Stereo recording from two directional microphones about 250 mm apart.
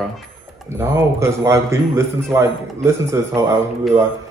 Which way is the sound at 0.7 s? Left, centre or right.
Centre.